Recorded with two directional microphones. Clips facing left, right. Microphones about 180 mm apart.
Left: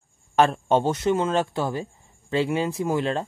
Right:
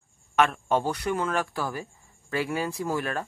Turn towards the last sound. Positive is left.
turn(degrees=20)  # may be behind; listen again after turning